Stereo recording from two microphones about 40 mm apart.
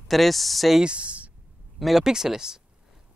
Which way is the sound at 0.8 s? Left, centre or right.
Right.